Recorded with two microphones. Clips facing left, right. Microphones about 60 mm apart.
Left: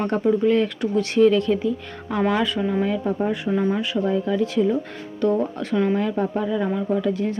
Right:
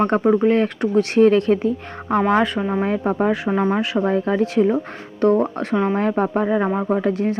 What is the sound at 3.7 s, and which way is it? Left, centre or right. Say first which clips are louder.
Speech: right 3 dB; right.